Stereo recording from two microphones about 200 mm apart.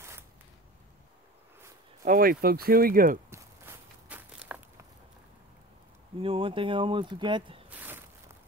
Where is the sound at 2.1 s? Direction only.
45° right (ahead or behind).